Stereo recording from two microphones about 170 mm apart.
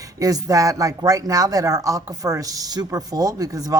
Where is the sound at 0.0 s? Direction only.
20° right (ahead or behind).